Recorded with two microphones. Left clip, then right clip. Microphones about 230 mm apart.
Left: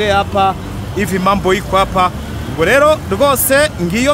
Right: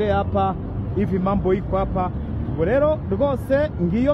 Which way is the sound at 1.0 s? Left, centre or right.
Centre.